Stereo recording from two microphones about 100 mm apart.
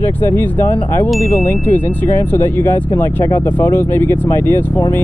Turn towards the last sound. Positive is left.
turn(degrees=20)  # may be behind; listen again after turning